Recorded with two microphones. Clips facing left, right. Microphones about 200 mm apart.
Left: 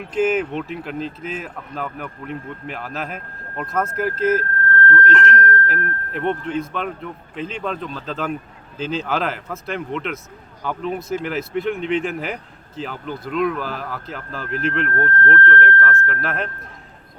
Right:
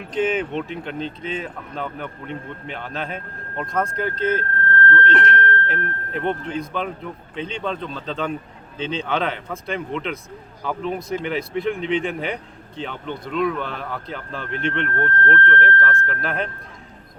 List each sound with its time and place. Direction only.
0.1 s speech: 5° left (ahead or behind)
4.2 s speech: 30° right (ahead or behind)
6.1 s speech: centre (ahead or behind)